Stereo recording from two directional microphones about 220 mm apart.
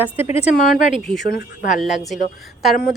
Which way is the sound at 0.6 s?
40° left (ahead or behind).